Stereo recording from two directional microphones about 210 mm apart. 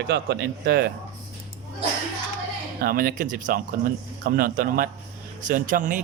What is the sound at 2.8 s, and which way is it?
Speech, 45° right (ahead or behind).